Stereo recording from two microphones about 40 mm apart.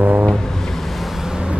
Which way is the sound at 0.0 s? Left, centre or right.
Right.